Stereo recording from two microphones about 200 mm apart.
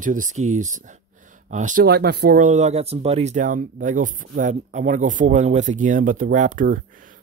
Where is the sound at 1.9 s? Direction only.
55° right (ahead or behind).